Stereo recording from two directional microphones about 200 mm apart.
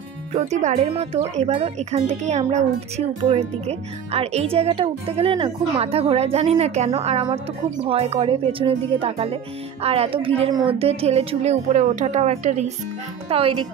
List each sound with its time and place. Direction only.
0.3 s speech: 35° right (ahead or behind)